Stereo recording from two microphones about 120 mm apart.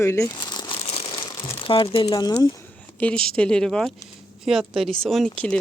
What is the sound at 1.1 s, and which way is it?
Crumpling, 40° left (ahead or behind).